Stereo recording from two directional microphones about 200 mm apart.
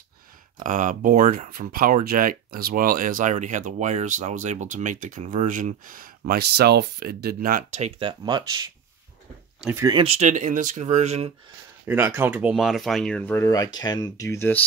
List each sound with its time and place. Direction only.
0.7 s speech: 40° right (ahead or behind)
8.1 s speech: 20° right (ahead or behind)
9.8 s speech: 25° right (ahead or behind)
11.8 s speech: 10° right (ahead or behind); by 14.6 s 15° left (ahead or behind)